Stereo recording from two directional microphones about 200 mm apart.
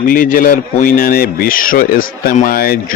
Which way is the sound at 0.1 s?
45° left (ahead or behind).